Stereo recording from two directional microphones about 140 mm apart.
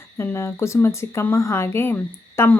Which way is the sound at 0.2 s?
20° left (ahead or behind).